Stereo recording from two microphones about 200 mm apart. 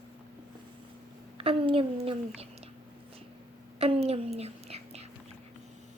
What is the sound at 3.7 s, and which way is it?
Whispering, 30° right (ahead or behind).